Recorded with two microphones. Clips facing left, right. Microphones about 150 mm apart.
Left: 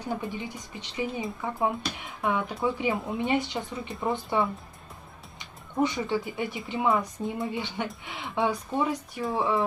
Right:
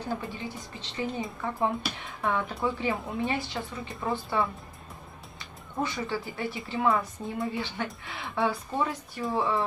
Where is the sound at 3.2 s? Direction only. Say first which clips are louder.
Left 6 dB; 20° left (ahead or behind).